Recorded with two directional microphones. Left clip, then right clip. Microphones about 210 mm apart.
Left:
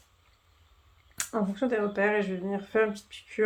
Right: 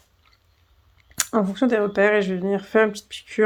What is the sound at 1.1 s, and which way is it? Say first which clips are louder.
Speech: right 9 dB; 50° right (ahead or behind).